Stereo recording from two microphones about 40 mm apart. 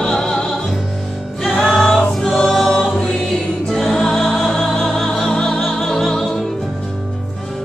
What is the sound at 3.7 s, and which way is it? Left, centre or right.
Music, centre.